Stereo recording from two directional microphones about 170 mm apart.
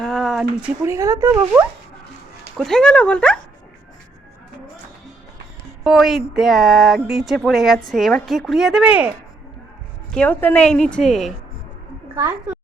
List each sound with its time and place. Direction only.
0.0 s a sound: centre (ahead or behind)
0.9 s speech: 15° right (ahead or behind)
2.6 s speech: 5° left (ahead or behind)
5.8 s speech: centre (ahead or behind)
10.1 s speech: 10° left (ahead or behind)